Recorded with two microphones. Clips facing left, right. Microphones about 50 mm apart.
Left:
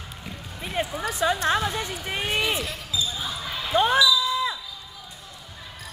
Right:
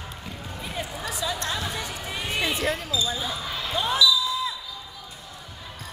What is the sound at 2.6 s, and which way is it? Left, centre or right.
Basketball bounce, right.